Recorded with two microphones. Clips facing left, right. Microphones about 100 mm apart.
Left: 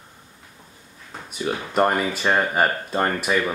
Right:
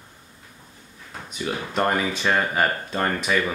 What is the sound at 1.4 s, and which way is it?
Speech, 5° left (ahead or behind).